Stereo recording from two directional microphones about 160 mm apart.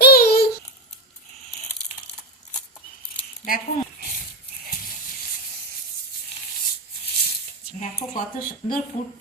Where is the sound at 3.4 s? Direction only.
60° left (ahead or behind).